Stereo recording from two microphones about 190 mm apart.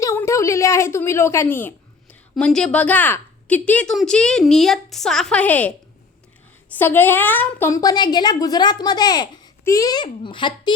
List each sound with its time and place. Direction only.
0.0 s a woman's voice: 15° left (ahead or behind)
6.7 s a woman's voice: 10° left (ahead or behind)